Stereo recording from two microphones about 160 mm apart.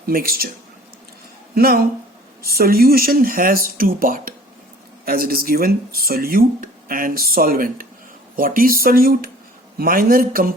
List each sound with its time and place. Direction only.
0.1 s speech: 65° right (ahead or behind)
1.5 s speech: 70° right (ahead or behind)